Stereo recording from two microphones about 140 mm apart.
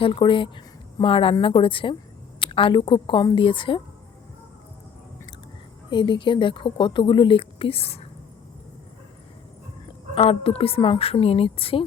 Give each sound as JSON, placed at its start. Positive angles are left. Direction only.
{"t": 0.0, "sound": "a woman's voice", "side_deg": 40}
{"t": 5.9, "sound": "a woman's voice", "side_deg": 35}
{"t": 10.2, "sound": "a woman's voice", "side_deg": 45}